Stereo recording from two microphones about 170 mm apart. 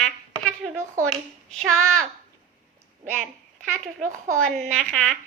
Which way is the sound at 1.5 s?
5° left (ahead or behind).